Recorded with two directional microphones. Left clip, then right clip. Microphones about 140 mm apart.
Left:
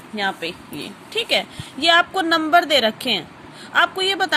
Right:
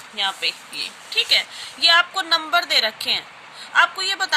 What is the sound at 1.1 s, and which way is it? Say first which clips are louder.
A woman's voice: right 2 dB; 40° left (ahead or behind).